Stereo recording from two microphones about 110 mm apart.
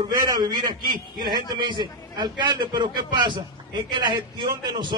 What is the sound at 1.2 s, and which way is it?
A man's voice, 40° right (ahead or behind).